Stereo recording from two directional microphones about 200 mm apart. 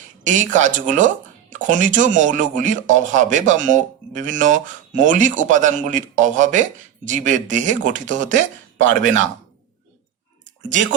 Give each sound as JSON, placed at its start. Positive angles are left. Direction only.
{"t": 0.3, "sound": "speech", "side_deg": -40}